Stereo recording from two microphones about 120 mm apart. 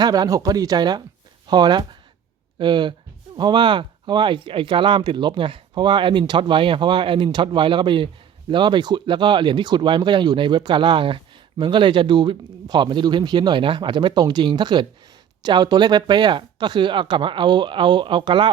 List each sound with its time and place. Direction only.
0.0 s speech: 35° right (ahead or behind)